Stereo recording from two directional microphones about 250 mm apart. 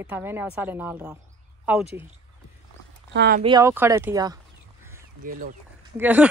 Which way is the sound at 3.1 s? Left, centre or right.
Right.